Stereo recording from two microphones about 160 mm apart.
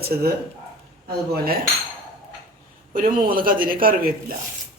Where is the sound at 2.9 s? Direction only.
65° right (ahead or behind).